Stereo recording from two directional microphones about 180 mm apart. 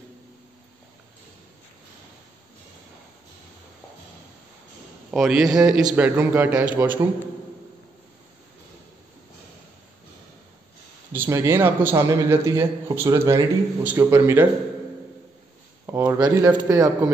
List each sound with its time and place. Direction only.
5.1 s a man's voice: centre (ahead or behind)
11.1 s a man's voice: 15° right (ahead or behind)
15.9 s a sound: 10° right (ahead or behind)
16.2 s speech: 20° right (ahead or behind)